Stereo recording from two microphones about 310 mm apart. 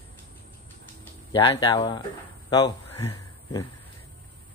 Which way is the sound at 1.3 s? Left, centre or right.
Centre.